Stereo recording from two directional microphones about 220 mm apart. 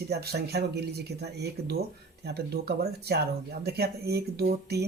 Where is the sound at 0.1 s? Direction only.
45° right (ahead or behind).